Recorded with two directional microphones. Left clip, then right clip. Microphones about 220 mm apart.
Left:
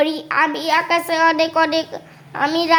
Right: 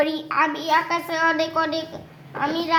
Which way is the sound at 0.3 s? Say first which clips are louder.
Left 3 dB; 50° left (ahead or behind).